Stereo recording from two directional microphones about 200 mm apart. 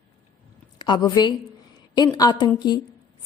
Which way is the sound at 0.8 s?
20° left (ahead or behind).